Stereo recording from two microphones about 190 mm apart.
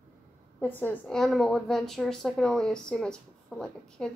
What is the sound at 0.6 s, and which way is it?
A woman's voice, 10° left (ahead or behind).